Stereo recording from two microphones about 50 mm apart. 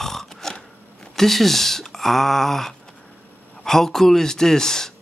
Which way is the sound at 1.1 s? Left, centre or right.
Centre.